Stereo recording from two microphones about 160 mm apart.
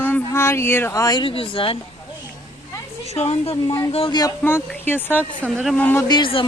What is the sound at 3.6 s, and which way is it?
Speech, 20° left (ahead or behind).